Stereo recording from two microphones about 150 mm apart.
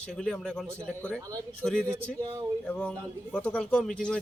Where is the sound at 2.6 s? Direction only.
10° left (ahead or behind).